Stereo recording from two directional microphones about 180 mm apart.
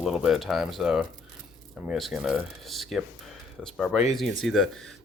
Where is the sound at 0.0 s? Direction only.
Centre (ahead or behind).